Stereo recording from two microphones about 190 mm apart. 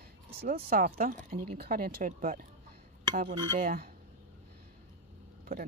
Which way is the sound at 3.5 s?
50° right (ahead or behind).